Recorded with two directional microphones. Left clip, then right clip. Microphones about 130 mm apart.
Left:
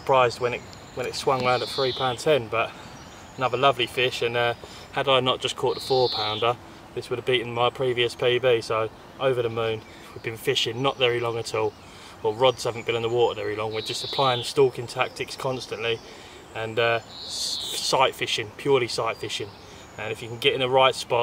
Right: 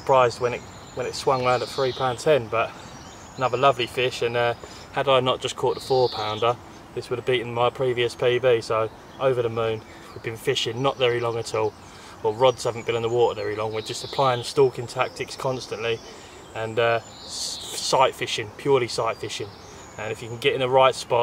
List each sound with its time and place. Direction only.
0.0 s speech: 5° right (ahead or behind)
2.1 s speech: centre (ahead or behind)
5.9 s speech: 10° left (ahead or behind)
6.4 s speech: centre (ahead or behind)